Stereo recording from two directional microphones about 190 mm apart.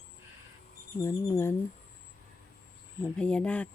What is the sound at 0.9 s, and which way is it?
Speech, 15° left (ahead or behind).